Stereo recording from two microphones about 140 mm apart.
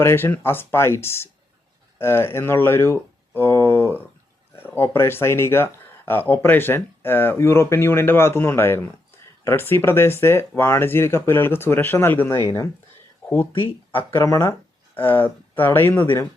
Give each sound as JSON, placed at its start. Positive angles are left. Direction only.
{"t": 0.0, "sound": "speech", "side_deg": 20}